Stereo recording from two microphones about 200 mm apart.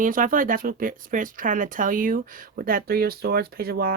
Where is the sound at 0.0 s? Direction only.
45° right (ahead or behind).